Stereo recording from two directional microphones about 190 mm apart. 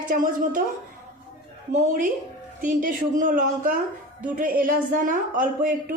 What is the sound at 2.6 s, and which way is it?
A woman's voice, 45° right (ahead or behind).